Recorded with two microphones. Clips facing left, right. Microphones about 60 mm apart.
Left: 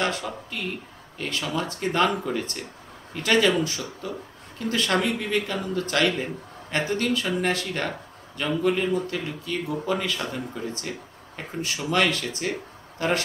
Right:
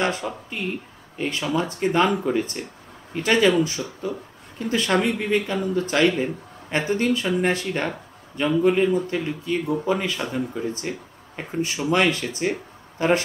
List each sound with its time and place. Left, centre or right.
0.0 s a man's voice: right
10.7 s a man's voice: right